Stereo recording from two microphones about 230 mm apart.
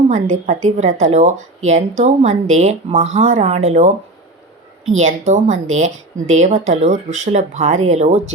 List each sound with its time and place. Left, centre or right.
0.1 s a woman's voice: right
4.9 s a woman's voice: right